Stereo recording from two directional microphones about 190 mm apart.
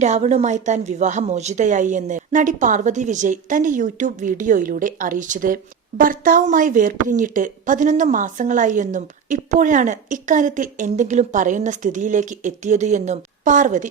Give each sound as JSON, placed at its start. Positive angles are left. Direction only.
{"t": 0.0, "sound": "a woman's voice", "side_deg": -35}